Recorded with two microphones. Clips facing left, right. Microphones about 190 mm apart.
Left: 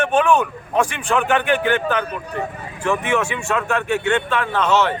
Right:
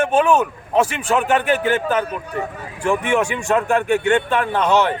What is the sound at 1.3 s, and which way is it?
Speech, 40° right (ahead or behind).